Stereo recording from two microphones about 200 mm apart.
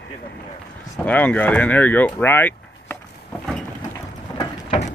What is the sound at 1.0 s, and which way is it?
Speech, 10° left (ahead or behind).